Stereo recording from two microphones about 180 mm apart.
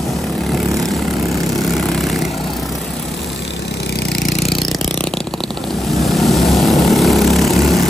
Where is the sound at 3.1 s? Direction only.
70° left (ahead or behind).